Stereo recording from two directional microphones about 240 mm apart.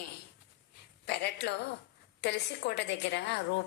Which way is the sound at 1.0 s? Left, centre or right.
Left.